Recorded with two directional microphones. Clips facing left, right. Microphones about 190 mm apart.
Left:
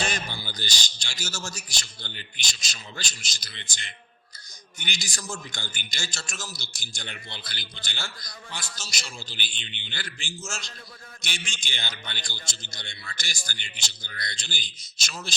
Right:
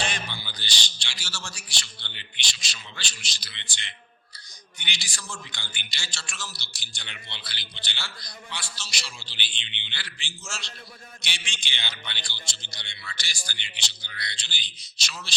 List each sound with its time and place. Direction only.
0.0 s a man's voice: 45° left (ahead or behind)